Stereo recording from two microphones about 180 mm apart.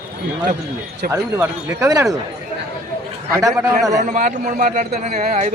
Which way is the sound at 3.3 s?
15° right (ahead or behind).